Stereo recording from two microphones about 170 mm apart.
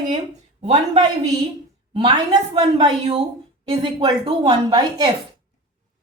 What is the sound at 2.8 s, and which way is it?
Speech, 35° right (ahead or behind).